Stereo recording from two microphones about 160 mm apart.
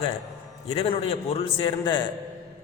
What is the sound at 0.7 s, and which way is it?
A man's voice, 40° left (ahead or behind).